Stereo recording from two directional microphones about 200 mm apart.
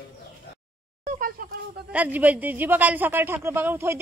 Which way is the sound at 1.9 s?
10° right (ahead or behind).